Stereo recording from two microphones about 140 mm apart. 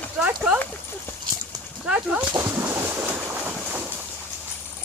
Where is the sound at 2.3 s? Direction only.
20° right (ahead or behind).